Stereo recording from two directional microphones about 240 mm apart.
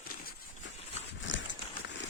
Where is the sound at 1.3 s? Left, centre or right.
Left.